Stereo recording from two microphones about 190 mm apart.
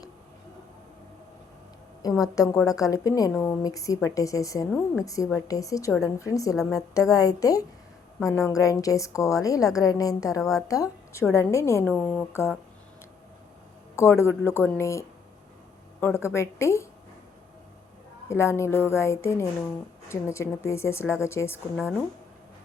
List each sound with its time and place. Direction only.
2.2 s a woman's voice: 20° left (ahead or behind)
13.9 s a woman's voice: 15° left (ahead or behind)
18.3 s a woman's voice: 15° left (ahead or behind)